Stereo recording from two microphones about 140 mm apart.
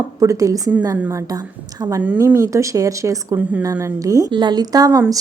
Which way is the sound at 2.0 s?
15° right (ahead or behind).